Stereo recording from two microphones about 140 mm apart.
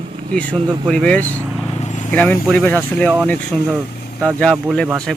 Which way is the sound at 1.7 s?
60° left (ahead or behind).